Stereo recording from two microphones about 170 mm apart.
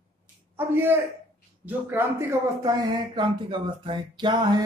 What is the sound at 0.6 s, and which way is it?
A man's voice, 15° right (ahead or behind).